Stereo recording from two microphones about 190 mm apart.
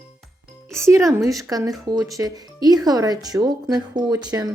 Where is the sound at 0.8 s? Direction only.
15° right (ahead or behind).